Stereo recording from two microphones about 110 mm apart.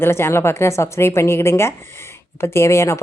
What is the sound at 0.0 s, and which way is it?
Speech, 20° left (ahead or behind).